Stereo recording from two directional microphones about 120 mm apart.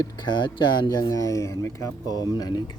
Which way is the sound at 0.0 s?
35° left (ahead or behind).